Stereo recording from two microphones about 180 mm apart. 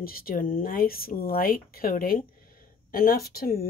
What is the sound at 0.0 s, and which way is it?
Speech, 55° left (ahead or behind).